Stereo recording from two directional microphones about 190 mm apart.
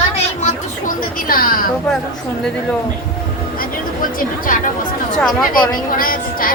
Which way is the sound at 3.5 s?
50° left (ahead or behind).